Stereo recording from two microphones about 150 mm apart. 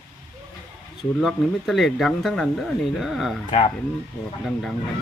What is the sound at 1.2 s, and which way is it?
Speech, centre (ahead or behind).